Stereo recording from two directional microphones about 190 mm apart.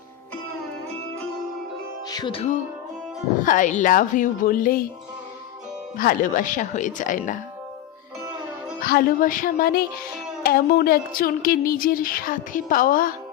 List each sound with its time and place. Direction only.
2.0 s music: 25° left (ahead or behind)
3.4 s speech: 45° left (ahead or behind)
6.0 s speech: 45° left (ahead or behind)
8.8 s speech: 50° left (ahead or behind)